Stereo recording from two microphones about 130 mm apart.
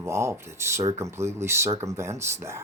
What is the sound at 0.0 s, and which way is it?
Speech, 20° right (ahead or behind).